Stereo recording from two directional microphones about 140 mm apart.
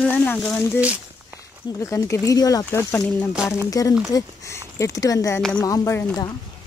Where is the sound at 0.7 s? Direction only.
10° right (ahead or behind).